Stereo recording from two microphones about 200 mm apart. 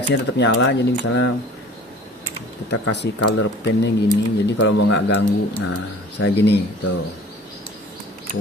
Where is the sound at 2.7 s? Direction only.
60° left (ahead or behind).